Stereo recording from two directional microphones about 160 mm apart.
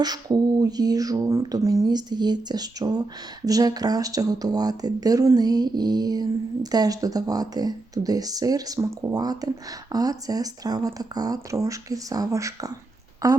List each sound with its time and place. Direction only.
0.0 s speech: 25° right (ahead or behind)